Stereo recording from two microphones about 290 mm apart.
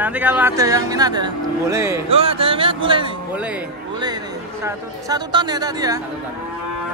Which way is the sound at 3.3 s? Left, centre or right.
Centre.